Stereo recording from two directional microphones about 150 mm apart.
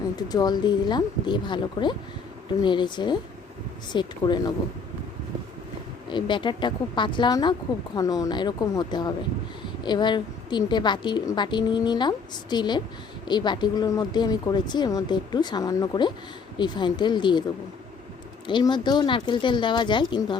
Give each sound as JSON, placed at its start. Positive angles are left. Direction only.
{"t": 0.2, "sound": "a woman's voice", "side_deg": 25}
{"t": 6.1, "sound": "a woman's voice", "side_deg": 30}
{"t": 18.4, "sound": "speech", "side_deg": 30}